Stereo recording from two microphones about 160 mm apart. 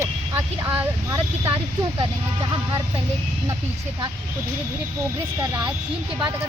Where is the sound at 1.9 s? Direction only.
30° right (ahead or behind).